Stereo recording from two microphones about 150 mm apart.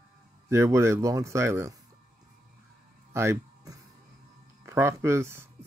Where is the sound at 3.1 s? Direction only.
20° right (ahead or behind).